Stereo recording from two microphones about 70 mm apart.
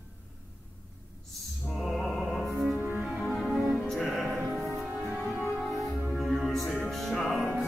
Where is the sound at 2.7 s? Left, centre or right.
Right.